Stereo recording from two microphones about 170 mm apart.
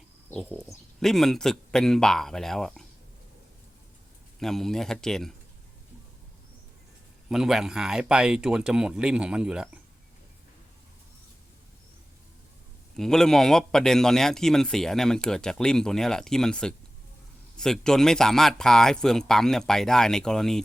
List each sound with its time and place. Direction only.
0.3 s a man's voice: 10° left (ahead or behind)
4.4 s a man's voice: centre (ahead or behind)
7.3 s a man's voice: 5° right (ahead or behind)
13.0 s a man's voice: 5° left (ahead or behind)